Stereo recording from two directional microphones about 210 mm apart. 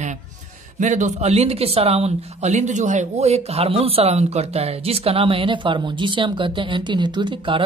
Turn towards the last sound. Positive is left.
turn(degrees=-25)  # may be behind; listen again after turning